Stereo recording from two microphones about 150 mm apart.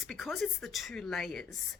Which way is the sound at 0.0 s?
Centre (ahead or behind).